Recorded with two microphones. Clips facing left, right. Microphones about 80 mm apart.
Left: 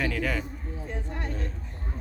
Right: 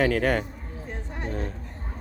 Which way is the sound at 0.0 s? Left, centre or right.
Right.